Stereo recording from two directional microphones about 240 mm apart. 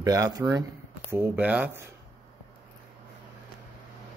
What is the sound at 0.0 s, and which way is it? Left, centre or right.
Speech, centre.